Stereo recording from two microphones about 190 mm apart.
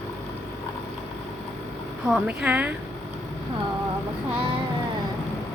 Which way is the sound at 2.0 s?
5° right (ahead or behind).